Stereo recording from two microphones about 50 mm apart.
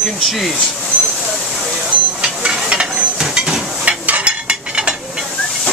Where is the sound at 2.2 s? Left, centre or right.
Right.